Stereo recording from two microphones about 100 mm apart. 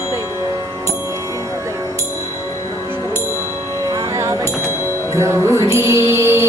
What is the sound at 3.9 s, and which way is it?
Music, 30° right (ahead or behind).